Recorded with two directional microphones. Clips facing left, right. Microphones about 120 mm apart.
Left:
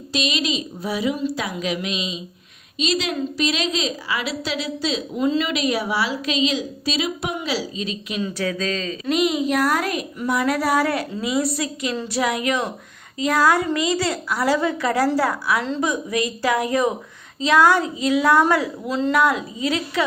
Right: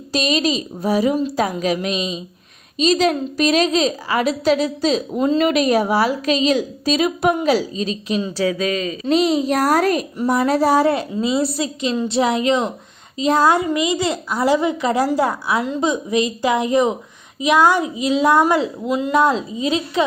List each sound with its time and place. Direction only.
0.1 s a woman's voice: 40° right (ahead or behind); by 9.0 s 10° right (ahead or behind)
9.0 s a woman's voice: 30° right (ahead or behind); by 19.2 s 15° right (ahead or behind)
19.2 s a woman's voice: 25° right (ahead or behind)